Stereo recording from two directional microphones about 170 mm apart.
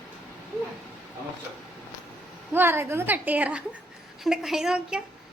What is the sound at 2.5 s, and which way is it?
A woman's voice, 15° right (ahead or behind).